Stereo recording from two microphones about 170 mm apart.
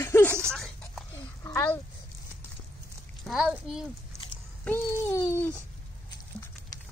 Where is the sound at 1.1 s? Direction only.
15° left (ahead or behind).